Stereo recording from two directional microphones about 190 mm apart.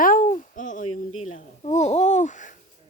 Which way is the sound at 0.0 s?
45° left (ahead or behind).